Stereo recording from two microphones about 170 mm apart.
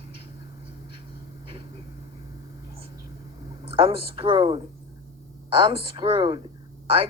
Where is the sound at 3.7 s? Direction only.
35° right (ahead or behind).